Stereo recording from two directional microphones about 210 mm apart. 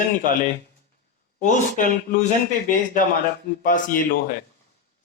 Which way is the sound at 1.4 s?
35° left (ahead or behind).